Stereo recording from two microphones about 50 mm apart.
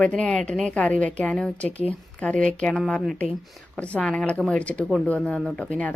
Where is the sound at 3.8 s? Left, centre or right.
Left.